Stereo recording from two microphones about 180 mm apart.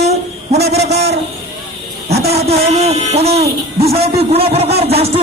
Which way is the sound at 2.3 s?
35° right (ahead or behind).